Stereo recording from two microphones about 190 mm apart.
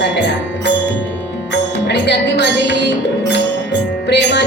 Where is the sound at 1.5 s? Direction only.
65° left (ahead or behind).